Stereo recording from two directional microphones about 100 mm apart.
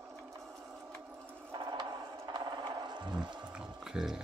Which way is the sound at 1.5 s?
50° right (ahead or behind).